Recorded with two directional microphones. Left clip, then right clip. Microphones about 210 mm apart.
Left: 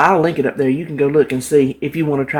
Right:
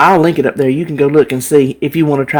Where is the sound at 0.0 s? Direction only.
45° right (ahead or behind).